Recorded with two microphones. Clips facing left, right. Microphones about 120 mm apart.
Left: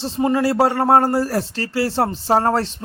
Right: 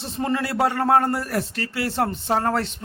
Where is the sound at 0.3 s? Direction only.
30° left (ahead or behind).